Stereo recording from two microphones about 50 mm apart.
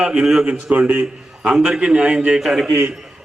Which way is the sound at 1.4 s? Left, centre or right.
Centre.